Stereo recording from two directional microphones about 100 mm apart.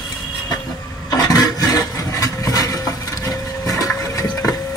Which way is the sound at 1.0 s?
40° left (ahead or behind).